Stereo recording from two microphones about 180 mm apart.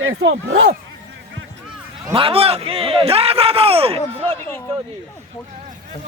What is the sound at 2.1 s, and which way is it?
A man's voice, 30° right (ahead or behind).